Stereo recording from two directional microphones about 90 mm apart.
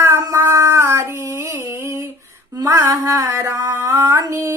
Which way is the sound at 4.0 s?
35° right (ahead or behind).